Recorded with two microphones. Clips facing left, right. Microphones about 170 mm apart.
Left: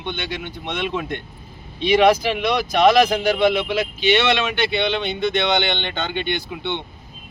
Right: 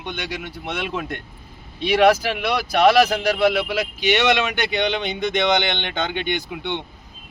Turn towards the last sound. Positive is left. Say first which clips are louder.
# even
turn(degrees=-10)  # may be behind; listen again after turning